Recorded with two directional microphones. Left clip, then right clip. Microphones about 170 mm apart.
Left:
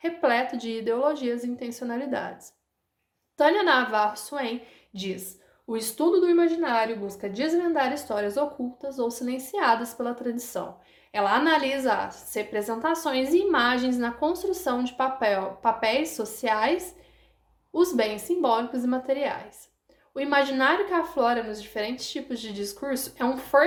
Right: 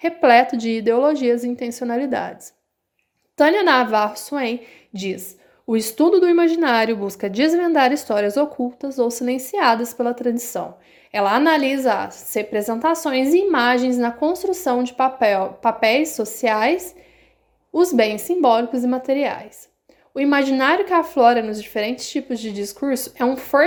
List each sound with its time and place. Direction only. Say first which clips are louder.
0.0 s a woman's voice: right 10 dB; 45° right (ahead or behind)